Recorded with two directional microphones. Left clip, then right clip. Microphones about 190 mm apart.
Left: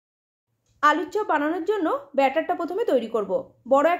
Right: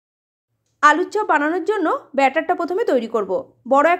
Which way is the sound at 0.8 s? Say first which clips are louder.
Right 6 dB; 30° right (ahead or behind).